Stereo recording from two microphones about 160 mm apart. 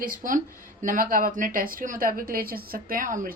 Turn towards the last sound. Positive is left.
turn(degrees=-55)  # may be behind; listen again after turning